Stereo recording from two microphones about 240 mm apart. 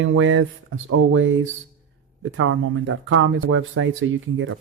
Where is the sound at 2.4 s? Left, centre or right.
Right.